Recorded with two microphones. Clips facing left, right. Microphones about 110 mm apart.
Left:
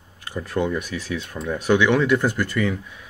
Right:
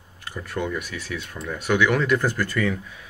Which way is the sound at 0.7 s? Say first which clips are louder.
Left 4 dB; 15° left (ahead or behind).